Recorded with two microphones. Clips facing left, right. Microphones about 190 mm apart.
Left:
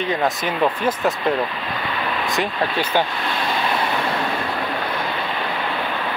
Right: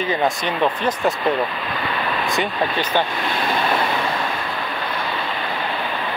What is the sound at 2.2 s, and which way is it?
Speech, 5° left (ahead or behind).